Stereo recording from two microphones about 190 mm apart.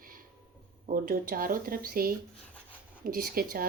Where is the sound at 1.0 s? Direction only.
50° right (ahead or behind).